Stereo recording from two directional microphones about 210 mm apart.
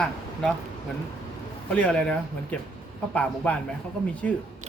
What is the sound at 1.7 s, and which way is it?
Speech, 5° left (ahead or behind).